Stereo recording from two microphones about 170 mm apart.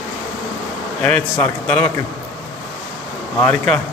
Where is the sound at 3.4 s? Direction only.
5° left (ahead or behind).